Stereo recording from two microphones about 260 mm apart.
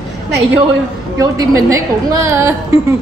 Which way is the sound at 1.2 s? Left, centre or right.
Centre.